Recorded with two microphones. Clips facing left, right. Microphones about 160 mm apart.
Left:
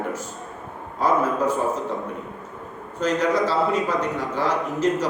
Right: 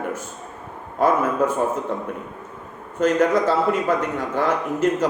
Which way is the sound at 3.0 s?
50° right (ahead or behind).